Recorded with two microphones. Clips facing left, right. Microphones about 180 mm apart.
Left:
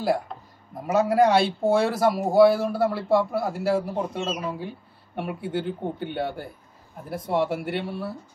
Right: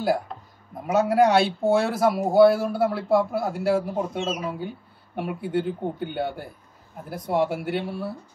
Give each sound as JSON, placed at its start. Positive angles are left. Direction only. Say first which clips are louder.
{"t": 0.8, "sound": "speech", "louder": "even", "side_deg": 0}